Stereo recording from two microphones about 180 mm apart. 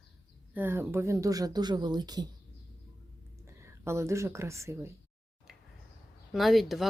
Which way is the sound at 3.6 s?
15° right (ahead or behind).